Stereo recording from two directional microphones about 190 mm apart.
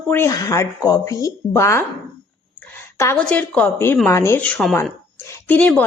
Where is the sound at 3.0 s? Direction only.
10° left (ahead or behind).